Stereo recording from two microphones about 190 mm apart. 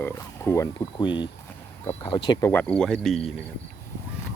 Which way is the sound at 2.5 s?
5° left (ahead or behind).